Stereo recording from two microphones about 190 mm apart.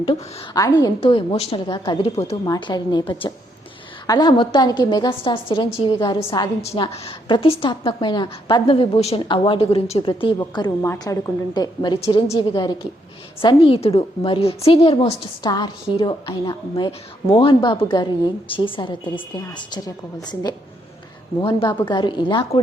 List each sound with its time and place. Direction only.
0.0 s a woman's voice: 30° left (ahead or behind)